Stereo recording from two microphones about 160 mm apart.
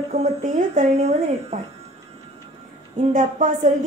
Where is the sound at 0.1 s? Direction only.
50° right (ahead or behind).